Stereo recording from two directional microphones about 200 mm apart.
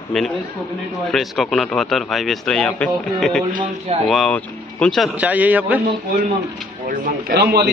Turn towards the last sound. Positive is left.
turn(degrees=-55)  # may be behind; listen again after turning